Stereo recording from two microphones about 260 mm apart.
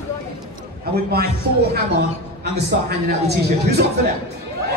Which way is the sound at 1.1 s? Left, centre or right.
Right.